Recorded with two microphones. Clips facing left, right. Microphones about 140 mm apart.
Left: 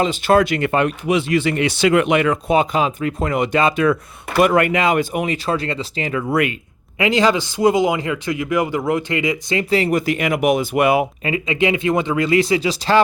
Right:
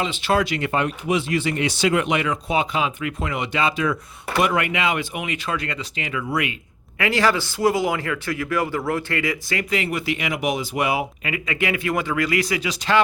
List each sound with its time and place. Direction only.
0.0 s speech: 45° left (ahead or behind)
6.2 s speech: 50° left (ahead or behind)
7.0 s speech: 20° left (ahead or behind)
9.6 s speech: 35° left (ahead or behind); by 11.0 s 55° left (ahead or behind)
11.2 s speech: 25° left (ahead or behind)